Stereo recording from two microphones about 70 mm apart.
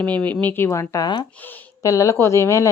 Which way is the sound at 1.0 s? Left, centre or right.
Left.